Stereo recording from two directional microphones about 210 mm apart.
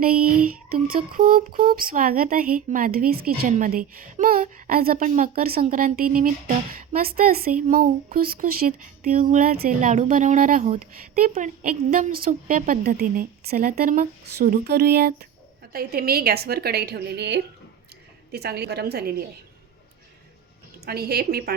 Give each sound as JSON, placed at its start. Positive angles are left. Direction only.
{"t": 0.0, "sound": "a woman's voice", "side_deg": -45}
{"t": 20.8, "sound": "a woman's voice", "side_deg": -50}